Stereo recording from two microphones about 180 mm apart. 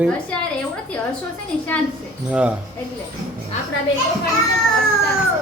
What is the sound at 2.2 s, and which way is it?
Speech, 5° right (ahead or behind).